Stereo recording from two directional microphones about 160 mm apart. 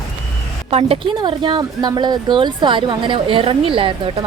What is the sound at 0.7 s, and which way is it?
A woman's voice, 35° right (ahead or behind).